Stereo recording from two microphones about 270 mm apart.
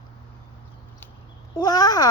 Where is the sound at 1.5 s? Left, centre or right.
Centre.